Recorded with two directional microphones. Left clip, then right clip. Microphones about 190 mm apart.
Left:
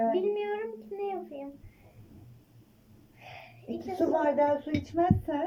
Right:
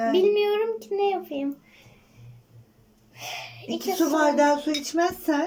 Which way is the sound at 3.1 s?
20° right (ahead or behind).